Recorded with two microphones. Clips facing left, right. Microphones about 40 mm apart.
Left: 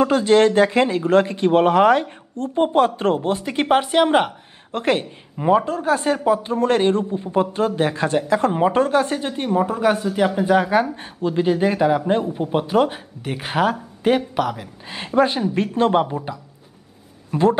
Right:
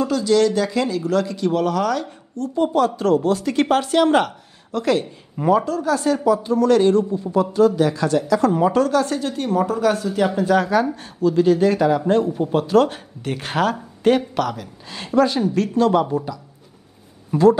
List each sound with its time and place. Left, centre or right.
0.0 s a woman's voice: left
4.7 s speech: left
5.4 s speech: centre
5.7 s a woman's voice: left; by 14.7 s centre
15.1 s a woman's voice: left
17.3 s speech: left